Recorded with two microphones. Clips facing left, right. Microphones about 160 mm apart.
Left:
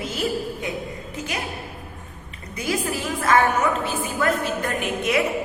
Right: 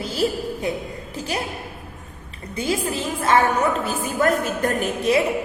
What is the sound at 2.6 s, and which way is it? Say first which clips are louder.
Speech: right 2 dB; 25° right (ahead or behind).